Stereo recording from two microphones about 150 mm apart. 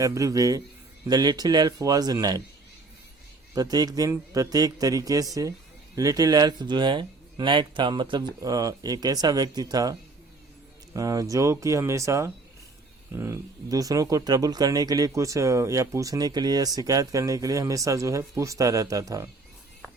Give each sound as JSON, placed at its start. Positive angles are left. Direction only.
{"t": 0.0, "sound": "speech", "side_deg": -20}
{"t": 3.5, "sound": "speech", "side_deg": -25}